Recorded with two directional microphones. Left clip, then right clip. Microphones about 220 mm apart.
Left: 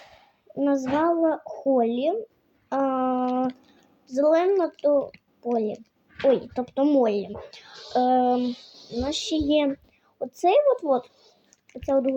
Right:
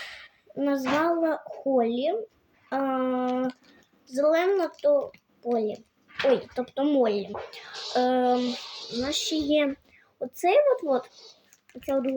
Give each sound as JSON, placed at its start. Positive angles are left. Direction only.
{"t": 0.5, "sound": "speech", "side_deg": -15}
{"t": 2.6, "sound": "a sound", "side_deg": -15}
{"t": 4.1, "sound": "speech", "side_deg": -10}